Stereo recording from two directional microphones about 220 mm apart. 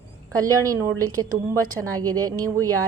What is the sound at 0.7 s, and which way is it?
A woman's voice, 15° right (ahead or behind).